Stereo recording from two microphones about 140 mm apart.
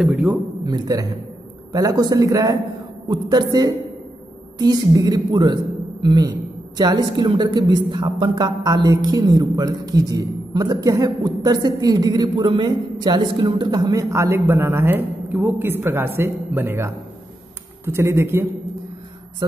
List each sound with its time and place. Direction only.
0.0 s speech: 5° right (ahead or behind)
0.7 s speech: 25° right (ahead or behind)